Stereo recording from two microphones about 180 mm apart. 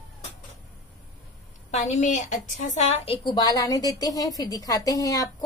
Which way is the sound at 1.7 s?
40° left (ahead or behind).